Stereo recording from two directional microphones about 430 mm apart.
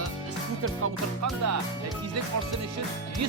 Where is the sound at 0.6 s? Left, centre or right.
Right.